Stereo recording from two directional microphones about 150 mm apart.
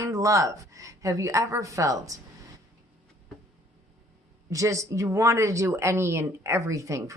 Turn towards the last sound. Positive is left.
turn(degrees=-20)  # may be behind; listen again after turning